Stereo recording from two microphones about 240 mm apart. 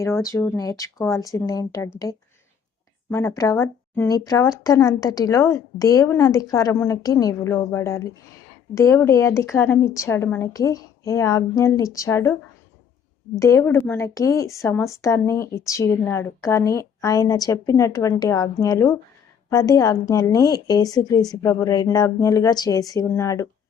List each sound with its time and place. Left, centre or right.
0.0 s a woman's voice: centre
3.1 s a woman's voice: centre
13.4 s a woman's voice: centre